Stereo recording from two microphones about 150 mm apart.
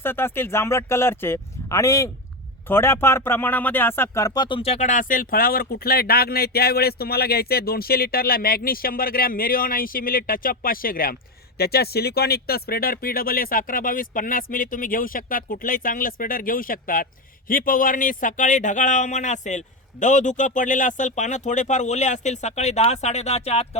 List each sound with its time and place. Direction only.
0.0 s speech: 15° left (ahead or behind)
4.4 s speech: 35° left (ahead or behind); by 11.1 s 75° left (ahead or behind)
11.5 s speech: 90° left; by 23.6 s 45° left (ahead or behind)